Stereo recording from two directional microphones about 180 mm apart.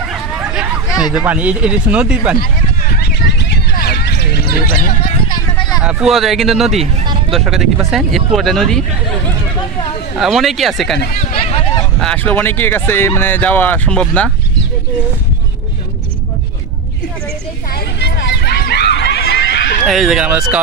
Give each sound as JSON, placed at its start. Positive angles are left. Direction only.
{"t": 0.8, "sound": "a sound", "side_deg": 20}
{"t": 1.1, "sound": "speech", "side_deg": -10}
{"t": 2.3, "sound": "a sound", "side_deg": 55}
{"t": 5.8, "sound": "speech", "side_deg": -5}
{"t": 6.7, "sound": "speech", "side_deg": -30}
{"t": 7.3, "sound": "speech", "side_deg": 0}
{"t": 10.1, "sound": "speech", "side_deg": 0}
{"t": 11.1, "sound": "speech", "side_deg": 40}
{"t": 12.0, "sound": "speech", "side_deg": 5}
{"t": 17.7, "sound": "a sound", "side_deg": 70}
{"t": 19.9, "sound": "speech", "side_deg": 0}